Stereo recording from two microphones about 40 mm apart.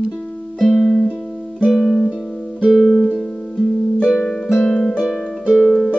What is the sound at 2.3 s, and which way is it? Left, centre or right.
Music, centre.